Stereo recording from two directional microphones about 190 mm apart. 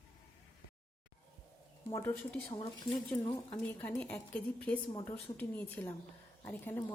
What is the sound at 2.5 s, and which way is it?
Speech, 25° left (ahead or behind).